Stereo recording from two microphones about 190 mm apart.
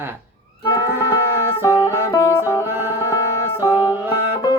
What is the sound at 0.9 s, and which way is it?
Music, 10° right (ahead or behind).